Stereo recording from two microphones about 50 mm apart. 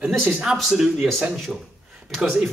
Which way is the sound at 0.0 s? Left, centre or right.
Right.